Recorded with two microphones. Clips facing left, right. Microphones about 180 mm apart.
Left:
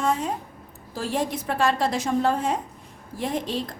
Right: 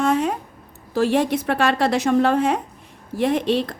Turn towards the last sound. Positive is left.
turn(degrees=-70)  # may be behind; listen again after turning